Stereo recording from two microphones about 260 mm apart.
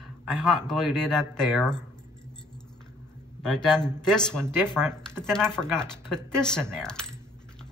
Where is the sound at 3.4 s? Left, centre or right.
Centre.